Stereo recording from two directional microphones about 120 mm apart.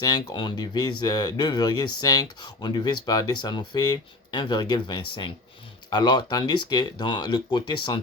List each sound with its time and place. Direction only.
0.0 s speech: 35° left (ahead or behind)